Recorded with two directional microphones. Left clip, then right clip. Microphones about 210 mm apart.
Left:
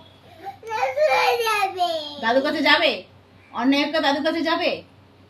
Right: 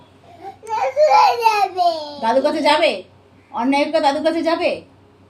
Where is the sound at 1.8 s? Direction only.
10° left (ahead or behind).